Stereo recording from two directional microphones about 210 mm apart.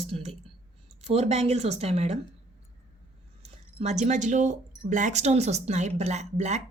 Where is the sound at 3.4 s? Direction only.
35° right (ahead or behind).